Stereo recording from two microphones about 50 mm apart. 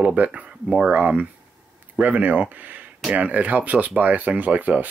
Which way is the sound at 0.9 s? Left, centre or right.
Right.